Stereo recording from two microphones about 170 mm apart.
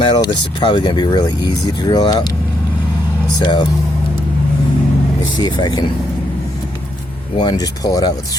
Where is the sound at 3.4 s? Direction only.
25° left (ahead or behind).